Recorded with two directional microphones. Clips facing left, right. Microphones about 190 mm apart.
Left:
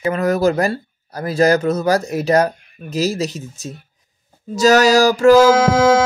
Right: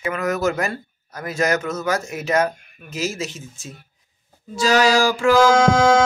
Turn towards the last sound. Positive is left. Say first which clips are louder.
# left 2 dB
turn(degrees=5)  # may be behind; listen again after turning